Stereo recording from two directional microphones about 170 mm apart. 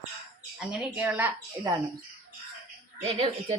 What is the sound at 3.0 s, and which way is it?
Speech, 35° right (ahead or behind).